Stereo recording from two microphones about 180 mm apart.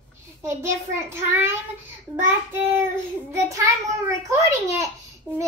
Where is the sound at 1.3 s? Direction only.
15° right (ahead or behind).